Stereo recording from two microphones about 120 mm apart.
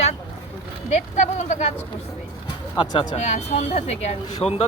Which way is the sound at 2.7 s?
45° left (ahead or behind).